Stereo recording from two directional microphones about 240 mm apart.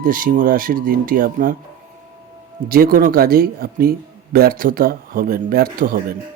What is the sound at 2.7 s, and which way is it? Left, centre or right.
Speech, right.